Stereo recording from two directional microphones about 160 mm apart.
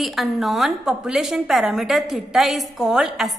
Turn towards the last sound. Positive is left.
turn(degrees=0)  # may be behind; listen again after turning